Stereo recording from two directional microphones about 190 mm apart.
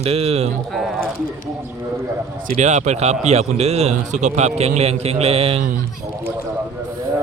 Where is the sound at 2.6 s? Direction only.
35° right (ahead or behind).